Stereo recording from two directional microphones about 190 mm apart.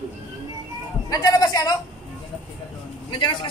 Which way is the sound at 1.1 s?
20° left (ahead or behind).